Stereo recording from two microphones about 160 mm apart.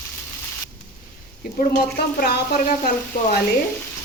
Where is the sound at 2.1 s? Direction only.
85° left.